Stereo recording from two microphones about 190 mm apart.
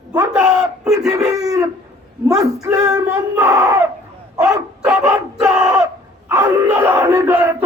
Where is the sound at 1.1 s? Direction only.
20° right (ahead or behind).